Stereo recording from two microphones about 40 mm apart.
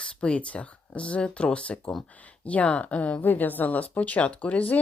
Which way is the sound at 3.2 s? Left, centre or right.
Left.